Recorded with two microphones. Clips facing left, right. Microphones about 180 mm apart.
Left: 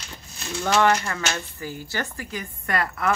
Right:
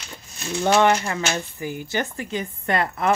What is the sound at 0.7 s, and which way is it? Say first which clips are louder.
Speech: right 2 dB; 20° right (ahead or behind).